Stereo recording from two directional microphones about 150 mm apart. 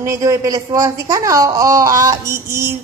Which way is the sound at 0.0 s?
20° right (ahead or behind).